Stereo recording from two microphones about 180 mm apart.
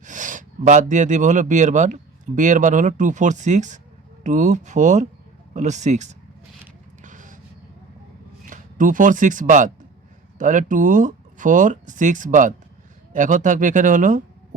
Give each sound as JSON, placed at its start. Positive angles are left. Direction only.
{"t": 0.0, "sound": "speech", "side_deg": -45}
{"t": 7.0, "sound": "vehicle", "side_deg": -45}
{"t": 8.4, "sound": "speech", "side_deg": -45}